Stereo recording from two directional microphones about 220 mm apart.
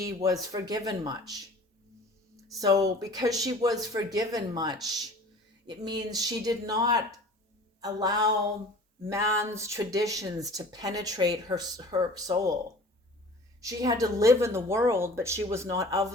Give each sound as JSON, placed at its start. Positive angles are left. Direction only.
{"t": 0.0, "sound": "speech", "side_deg": -15}
{"t": 2.6, "sound": "speech", "side_deg": -15}
{"t": 13.6, "sound": "speech", "side_deg": -15}